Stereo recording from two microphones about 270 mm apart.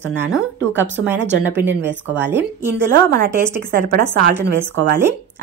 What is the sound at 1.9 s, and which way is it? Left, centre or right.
Speech, right.